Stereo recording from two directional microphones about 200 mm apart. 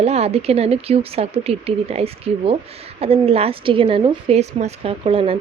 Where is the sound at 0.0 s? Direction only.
30° right (ahead or behind).